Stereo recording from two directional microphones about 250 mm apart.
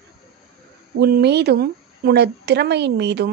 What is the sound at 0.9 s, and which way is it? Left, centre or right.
A woman's voice, right.